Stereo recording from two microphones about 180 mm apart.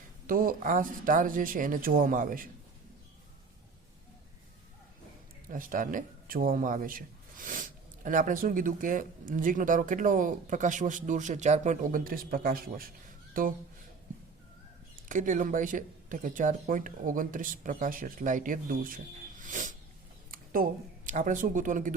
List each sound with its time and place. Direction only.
0.3 s a man's voice: 50° right (ahead or behind)
5.5 s a man's voice: 50° right (ahead or behind)
15.1 s a man's voice: 45° right (ahead or behind)
20.3 s a sound: 55° right (ahead or behind)
21.1 s a man's voice: 45° right (ahead or behind)